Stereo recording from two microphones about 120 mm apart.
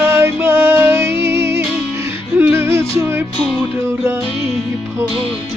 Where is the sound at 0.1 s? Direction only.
20° right (ahead or behind).